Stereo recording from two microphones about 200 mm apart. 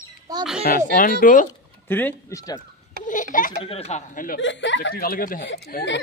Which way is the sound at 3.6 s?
30° left (ahead or behind).